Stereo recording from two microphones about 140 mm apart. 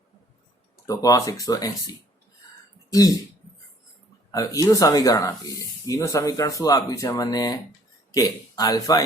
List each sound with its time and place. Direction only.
0.9 s speech: 25° left (ahead or behind)
4.3 s speech: 25° left (ahead or behind)